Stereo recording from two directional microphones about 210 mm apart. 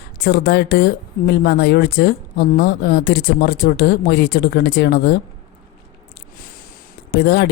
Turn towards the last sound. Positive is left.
turn(degrees=50)  # may be behind; listen again after turning